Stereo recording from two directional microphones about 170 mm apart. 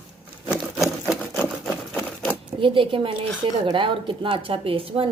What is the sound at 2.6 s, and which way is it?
Speech, 30° right (ahead or behind).